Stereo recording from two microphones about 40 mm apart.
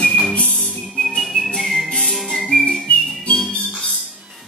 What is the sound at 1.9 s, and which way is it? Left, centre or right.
Music, centre.